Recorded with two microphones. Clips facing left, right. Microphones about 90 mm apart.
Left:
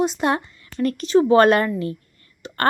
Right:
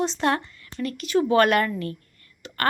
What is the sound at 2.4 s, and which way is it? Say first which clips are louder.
Whispering: left 5 dB; 20° left (ahead or behind).